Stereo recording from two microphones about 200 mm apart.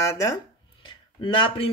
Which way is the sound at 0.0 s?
15° left (ahead or behind).